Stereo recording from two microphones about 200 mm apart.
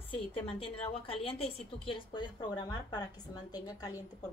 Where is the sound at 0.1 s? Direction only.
30° left (ahead or behind).